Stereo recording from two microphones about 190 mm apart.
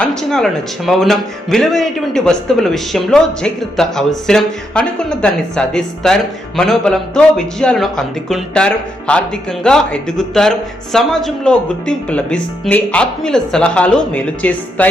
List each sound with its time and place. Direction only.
0.0 s speech: 5° left (ahead or behind)